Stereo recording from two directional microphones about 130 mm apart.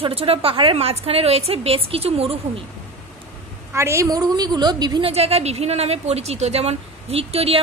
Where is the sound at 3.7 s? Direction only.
20° right (ahead or behind).